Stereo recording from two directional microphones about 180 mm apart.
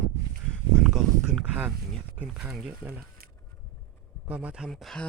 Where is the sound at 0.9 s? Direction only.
Centre (ahead or behind).